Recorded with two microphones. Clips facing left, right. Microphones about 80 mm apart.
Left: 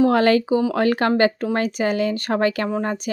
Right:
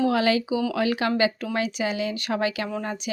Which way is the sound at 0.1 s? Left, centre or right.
Left.